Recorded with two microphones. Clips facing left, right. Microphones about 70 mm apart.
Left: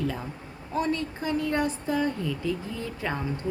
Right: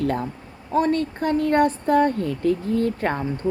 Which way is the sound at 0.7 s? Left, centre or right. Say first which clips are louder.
Right 7 dB; right.